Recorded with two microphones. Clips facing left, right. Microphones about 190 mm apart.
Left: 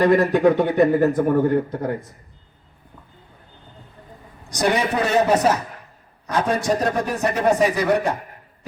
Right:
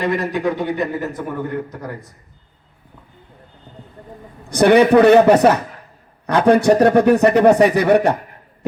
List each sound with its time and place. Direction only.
0.0 s speech: 50° left (ahead or behind)
1.7 s a man's voice: 25° left (ahead or behind)
4.4 s speech: 60° right (ahead or behind)